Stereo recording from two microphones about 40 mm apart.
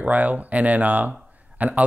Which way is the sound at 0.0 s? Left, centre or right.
Right.